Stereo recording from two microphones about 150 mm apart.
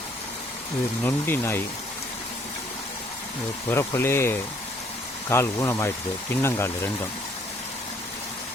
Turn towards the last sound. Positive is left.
turn(degrees=15)  # may be behind; listen again after turning